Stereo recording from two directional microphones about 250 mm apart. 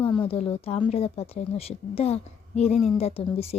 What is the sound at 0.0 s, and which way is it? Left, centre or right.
Speech, centre.